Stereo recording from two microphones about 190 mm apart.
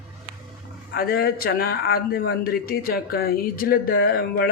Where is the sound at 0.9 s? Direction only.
55° left (ahead or behind).